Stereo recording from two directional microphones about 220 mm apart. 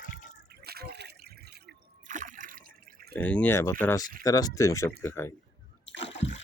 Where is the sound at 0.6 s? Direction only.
45° right (ahead or behind).